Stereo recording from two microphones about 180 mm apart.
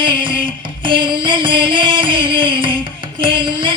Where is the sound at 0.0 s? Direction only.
25° right (ahead or behind).